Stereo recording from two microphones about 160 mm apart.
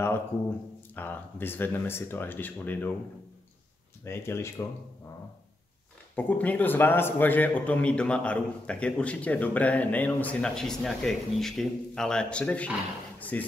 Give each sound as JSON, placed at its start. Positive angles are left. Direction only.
{"t": 0.9, "sound": "a man's voice", "side_deg": 15}
{"t": 4.0, "sound": "a man's voice", "side_deg": 15}
{"t": 6.1, "sound": "a man's voice", "side_deg": 10}